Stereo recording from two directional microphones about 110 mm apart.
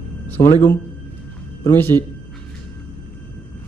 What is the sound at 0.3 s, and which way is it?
Speech, 20° left (ahead or behind).